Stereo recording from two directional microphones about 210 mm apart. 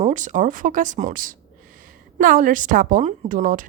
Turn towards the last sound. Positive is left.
turn(degrees=-40)  # may be behind; listen again after turning